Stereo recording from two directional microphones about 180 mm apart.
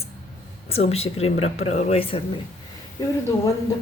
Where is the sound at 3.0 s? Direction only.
20° left (ahead or behind).